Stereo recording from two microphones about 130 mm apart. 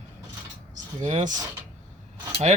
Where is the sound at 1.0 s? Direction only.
70° right (ahead or behind).